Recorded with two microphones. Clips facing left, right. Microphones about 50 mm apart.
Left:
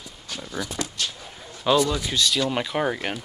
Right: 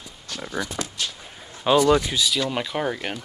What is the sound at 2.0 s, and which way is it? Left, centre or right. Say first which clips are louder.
Speech: left 1 dB; centre.